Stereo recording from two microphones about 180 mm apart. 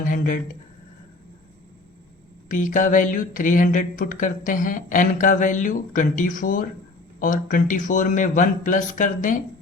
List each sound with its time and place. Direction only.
0.0 s speech: 50° left (ahead or behind)
2.5 s speech: 45° left (ahead or behind)